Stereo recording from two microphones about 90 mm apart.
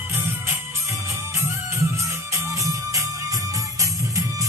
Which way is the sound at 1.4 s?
35° right (ahead or behind).